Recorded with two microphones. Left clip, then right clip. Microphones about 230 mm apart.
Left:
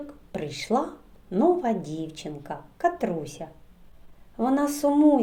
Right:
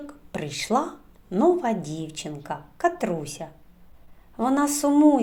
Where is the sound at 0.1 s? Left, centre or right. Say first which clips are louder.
Right 1 dB; right.